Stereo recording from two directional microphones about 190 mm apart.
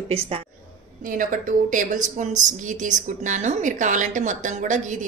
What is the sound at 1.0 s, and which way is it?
A woman's voice, 45° right (ahead or behind).